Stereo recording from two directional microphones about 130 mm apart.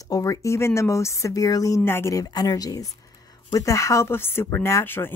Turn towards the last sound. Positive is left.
turn(degrees=15)  # may be behind; listen again after turning